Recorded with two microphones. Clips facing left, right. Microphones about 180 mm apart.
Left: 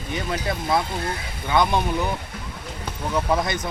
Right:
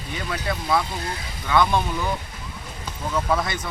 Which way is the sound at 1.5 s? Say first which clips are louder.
Even; 20° left (ahead or behind).